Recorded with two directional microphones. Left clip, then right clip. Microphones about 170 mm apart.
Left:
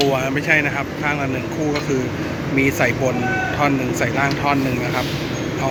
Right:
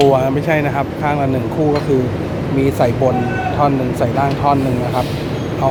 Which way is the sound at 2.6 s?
15° right (ahead or behind).